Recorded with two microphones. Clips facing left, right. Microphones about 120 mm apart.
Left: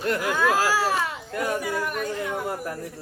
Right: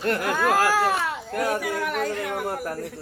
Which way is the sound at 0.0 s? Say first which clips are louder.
Even; 55° right (ahead or behind).